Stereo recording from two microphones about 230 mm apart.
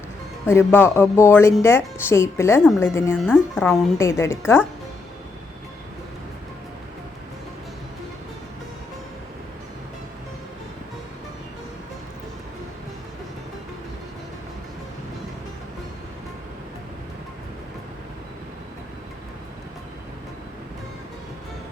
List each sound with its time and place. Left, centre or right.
0.4 s a woman's voice: centre